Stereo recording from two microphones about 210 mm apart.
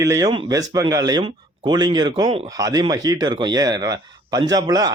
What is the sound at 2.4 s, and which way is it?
Speech, 15° right (ahead or behind).